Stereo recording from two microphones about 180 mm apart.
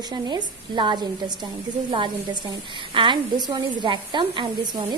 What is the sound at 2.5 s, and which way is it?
A woman's voice, 25° right (ahead or behind).